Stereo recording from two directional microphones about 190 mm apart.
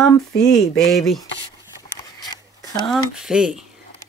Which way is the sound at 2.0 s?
20° left (ahead or behind).